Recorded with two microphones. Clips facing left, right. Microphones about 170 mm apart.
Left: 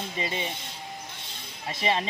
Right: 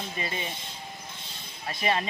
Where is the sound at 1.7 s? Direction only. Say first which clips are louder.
Left 1 dB; 25° left (ahead or behind).